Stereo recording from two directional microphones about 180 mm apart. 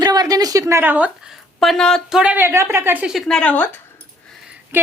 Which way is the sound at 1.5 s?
Centre (ahead or behind).